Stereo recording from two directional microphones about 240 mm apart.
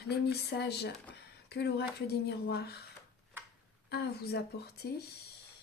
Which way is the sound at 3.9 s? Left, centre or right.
Left.